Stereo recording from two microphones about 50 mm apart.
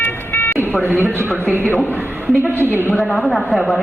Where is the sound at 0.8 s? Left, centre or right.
Right.